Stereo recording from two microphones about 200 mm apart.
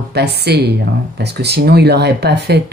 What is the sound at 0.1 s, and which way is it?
Speech, 55° right (ahead or behind).